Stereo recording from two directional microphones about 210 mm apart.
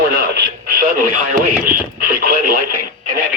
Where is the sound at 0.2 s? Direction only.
50° right (ahead or behind).